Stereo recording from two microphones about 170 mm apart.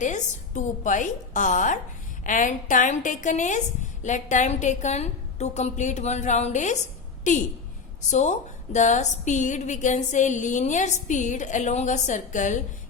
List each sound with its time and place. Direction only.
0.0 s a woman's voice: 45° left (ahead or behind)